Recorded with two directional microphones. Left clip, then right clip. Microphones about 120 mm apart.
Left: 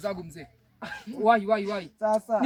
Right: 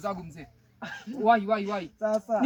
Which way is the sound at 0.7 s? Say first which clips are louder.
Left 1 dB; 55° left (ahead or behind).